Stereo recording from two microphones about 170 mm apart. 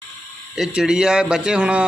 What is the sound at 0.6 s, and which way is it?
Speech, 5° right (ahead or behind).